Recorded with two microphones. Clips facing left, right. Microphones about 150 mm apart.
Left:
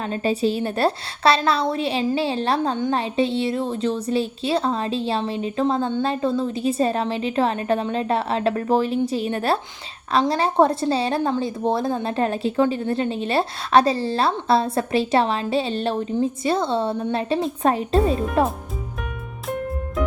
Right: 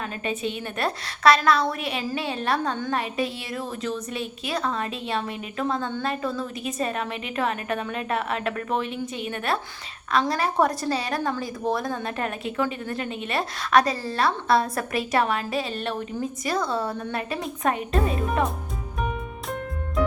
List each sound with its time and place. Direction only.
0.0 s a woman's voice: 30° left (ahead or behind)